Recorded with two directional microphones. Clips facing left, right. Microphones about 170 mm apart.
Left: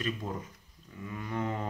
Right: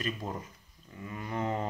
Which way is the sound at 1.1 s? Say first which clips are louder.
Right 1 dB; 30° right (ahead or behind).